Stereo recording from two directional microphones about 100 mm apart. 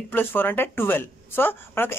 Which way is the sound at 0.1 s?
20° left (ahead or behind).